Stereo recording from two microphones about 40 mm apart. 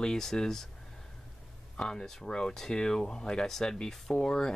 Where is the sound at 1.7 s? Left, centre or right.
Centre.